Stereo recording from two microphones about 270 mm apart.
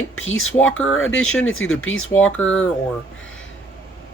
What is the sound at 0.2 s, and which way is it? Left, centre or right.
Speech, left.